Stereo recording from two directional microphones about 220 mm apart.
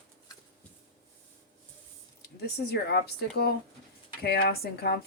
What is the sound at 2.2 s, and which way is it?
Speech, 45° left (ahead or behind).